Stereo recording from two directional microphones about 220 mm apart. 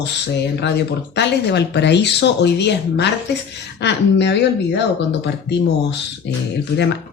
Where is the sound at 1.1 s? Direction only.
50° left (ahead or behind).